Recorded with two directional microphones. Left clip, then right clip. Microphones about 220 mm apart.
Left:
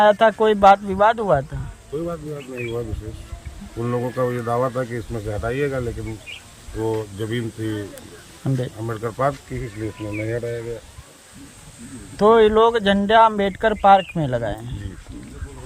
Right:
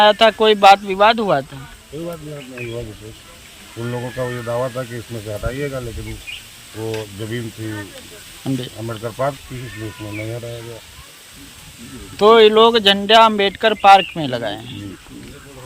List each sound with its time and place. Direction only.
0.0 s a man's voice: 35° left (ahead or behind)
3.9 s speech: 15° left (ahead or behind)
8.4 s a man's voice: 40° left (ahead or behind)
8.9 s speech: 20° left (ahead or behind)
12.1 s a man's voice: 35° left (ahead or behind)